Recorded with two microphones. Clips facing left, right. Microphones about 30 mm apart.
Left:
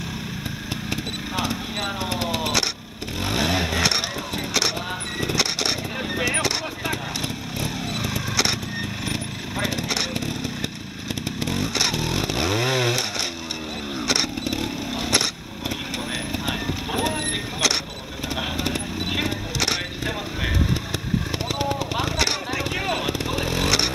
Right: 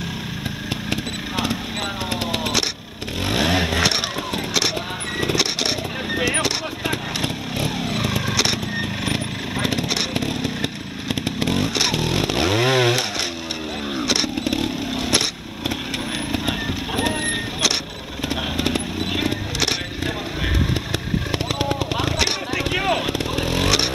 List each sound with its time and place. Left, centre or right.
1.3 s vehicle: centre
2.3 s a sound: centre
3.3 s vehicle: centre
5.2 s vehicle: centre
7.2 s motorcycle: right
9.0 s vehicle: right
10.2 s chainsaw: centre
14.0 s motorcycle: centre
15.0 s lawn mower: centre
16.4 s vehicle: centre
18.3 s vehicle: right
19.1 s a sound: centre
21.5 s a sound: centre